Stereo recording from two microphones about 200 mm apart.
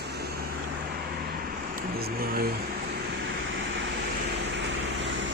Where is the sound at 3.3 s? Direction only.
70° right (ahead or behind).